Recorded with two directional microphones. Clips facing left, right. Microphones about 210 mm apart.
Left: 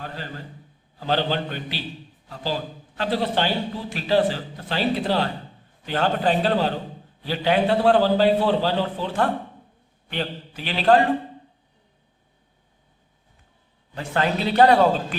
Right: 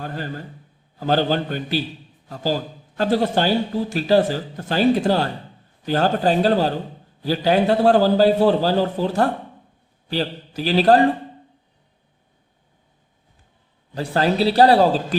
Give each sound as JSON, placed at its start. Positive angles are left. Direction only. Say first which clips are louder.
{"t": 0.0, "sound": "a man's voice", "louder": "right 5 dB", "side_deg": -50}
{"t": 13.9, "sound": "a man's voice", "louder": "right 4 dB", "side_deg": -35}